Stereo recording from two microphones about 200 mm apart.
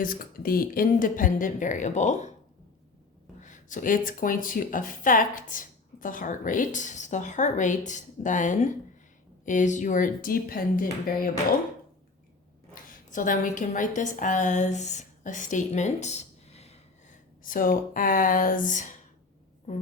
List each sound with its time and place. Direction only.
0.0 s speech: 45° left (ahead or behind)
3.4 s speech: 40° left (ahead or behind)
12.7 s a woman's voice: 40° left (ahead or behind)